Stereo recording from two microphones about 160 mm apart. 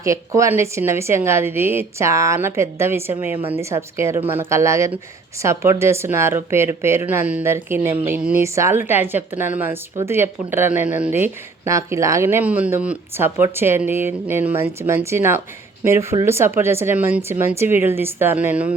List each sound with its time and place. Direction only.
0.0 s speech: 20° right (ahead or behind)